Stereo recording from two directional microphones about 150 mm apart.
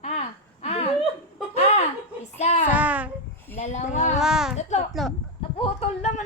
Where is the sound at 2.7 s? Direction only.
10° right (ahead or behind).